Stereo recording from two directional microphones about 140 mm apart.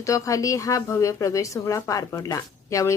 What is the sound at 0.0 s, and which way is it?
Speech, 25° left (ahead or behind).